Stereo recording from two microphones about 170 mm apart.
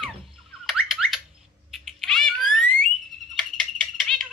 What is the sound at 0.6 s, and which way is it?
Squawk, centre (ahead or behind).